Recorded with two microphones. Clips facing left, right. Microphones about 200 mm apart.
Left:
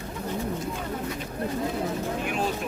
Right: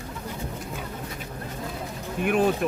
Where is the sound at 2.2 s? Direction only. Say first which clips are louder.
Right 11 dB; 55° right (ahead or behind).